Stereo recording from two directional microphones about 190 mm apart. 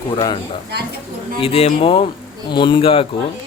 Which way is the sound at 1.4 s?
30° left (ahead or behind).